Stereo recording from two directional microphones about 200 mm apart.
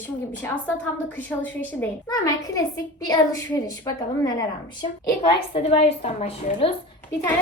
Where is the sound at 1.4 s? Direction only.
15° left (ahead or behind); by 6.6 s 35° left (ahead or behind).